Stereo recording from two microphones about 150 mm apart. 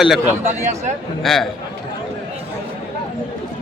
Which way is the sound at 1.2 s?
Centre (ahead or behind).